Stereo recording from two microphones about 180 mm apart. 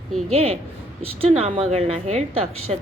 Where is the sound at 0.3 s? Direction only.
35° right (ahead or behind).